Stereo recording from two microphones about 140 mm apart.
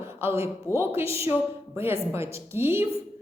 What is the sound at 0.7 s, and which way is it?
A woman's voice, 15° right (ahead or behind).